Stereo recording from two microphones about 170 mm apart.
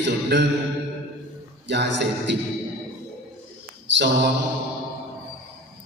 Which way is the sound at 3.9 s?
90° right.